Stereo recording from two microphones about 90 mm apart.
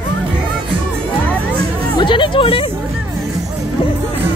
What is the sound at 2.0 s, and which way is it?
Music, 65° left (ahead or behind).